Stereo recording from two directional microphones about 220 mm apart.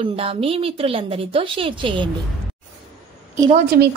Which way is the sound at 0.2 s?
25° right (ahead or behind).